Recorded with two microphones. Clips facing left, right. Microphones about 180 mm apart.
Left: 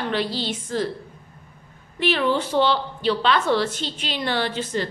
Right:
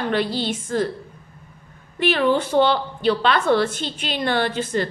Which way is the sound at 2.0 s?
50° right (ahead or behind).